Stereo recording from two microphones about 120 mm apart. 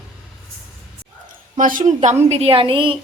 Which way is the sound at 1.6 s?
90° right.